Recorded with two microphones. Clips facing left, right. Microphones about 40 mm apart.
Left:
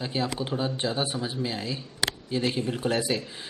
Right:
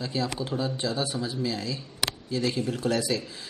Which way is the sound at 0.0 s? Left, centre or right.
Left.